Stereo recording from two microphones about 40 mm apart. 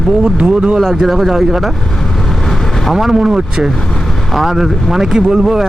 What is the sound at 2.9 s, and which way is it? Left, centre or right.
Speech, centre.